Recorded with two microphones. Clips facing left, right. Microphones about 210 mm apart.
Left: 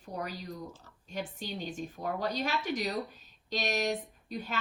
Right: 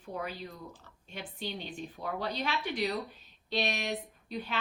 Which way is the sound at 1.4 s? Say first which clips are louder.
Left 1 dB; 45° left (ahead or behind).